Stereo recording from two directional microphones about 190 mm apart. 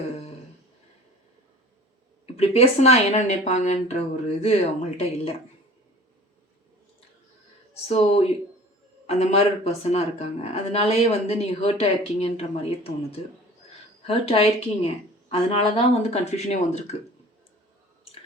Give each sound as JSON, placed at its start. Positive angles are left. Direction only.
{"t": 2.2, "sound": "speech", "side_deg": 35}
{"t": 7.7, "sound": "speech", "side_deg": 35}
{"t": 9.0, "sound": "speech", "side_deg": 35}